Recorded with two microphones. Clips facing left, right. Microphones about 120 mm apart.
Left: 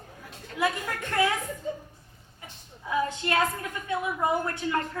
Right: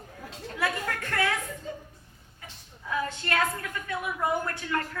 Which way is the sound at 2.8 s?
20° left (ahead or behind).